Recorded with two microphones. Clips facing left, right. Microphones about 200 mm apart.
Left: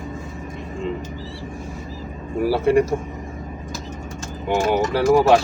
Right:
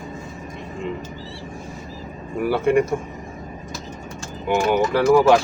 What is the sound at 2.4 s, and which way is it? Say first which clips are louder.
Speech: left 1 dB; 35° left (ahead or behind).